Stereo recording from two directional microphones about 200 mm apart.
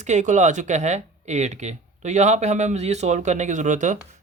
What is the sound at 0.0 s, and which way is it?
Speech, 35° right (ahead or behind).